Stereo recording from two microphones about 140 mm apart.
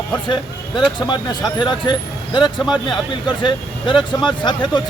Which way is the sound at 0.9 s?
35° left (ahead or behind).